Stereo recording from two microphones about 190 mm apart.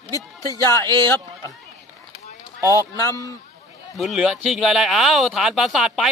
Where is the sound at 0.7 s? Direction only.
20° right (ahead or behind).